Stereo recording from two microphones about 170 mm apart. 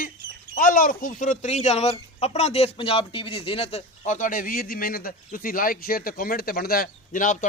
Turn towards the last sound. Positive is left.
turn(degrees=50)  # may be behind; listen again after turning